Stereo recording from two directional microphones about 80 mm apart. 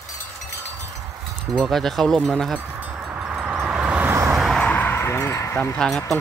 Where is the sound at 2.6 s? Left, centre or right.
Right.